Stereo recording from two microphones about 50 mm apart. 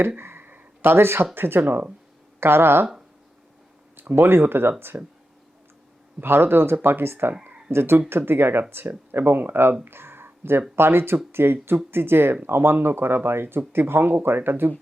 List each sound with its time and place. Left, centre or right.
0.2 s speech: right
4.1 s speech: right
6.2 s speech: right
9.8 s a sound: right
10.8 s speech: right